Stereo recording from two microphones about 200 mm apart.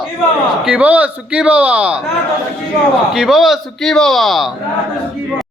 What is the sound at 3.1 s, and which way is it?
Speech, centre (ahead or behind).